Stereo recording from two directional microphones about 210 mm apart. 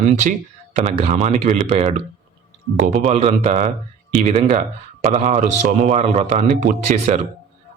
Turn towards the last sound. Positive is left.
turn(degrees=-35)  # may be behind; listen again after turning